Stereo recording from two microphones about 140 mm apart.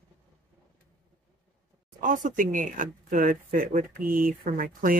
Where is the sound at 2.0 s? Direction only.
65° right (ahead or behind).